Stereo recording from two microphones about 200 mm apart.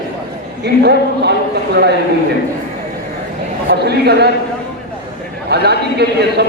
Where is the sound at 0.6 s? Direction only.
55° right (ahead or behind).